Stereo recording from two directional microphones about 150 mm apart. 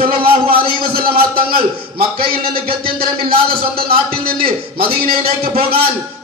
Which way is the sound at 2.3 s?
90° right.